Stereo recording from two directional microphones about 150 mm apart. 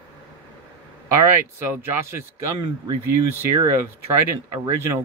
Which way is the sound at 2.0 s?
20° right (ahead or behind).